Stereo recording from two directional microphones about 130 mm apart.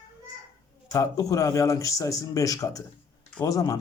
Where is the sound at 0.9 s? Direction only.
25° left (ahead or behind).